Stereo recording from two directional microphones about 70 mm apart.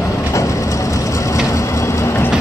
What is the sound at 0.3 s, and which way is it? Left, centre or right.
Vehicle, left.